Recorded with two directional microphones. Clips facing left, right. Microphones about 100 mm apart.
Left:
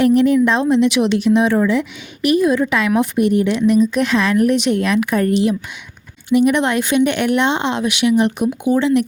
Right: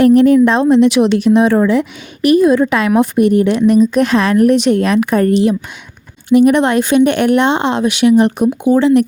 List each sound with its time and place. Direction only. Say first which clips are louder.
0.0 s speech: right 5 dB; 45° right (ahead or behind)